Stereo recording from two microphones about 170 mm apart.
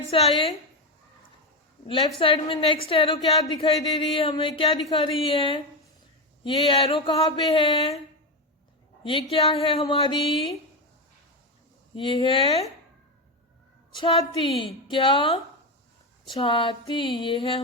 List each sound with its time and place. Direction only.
0.1 s speech: 35° left (ahead or behind)
1.9 s speech: 30° left (ahead or behind)
9.0 s speech: 30° left (ahead or behind)
11.9 s speech: 30° left (ahead or behind)
14.0 s speech: 30° left (ahead or behind)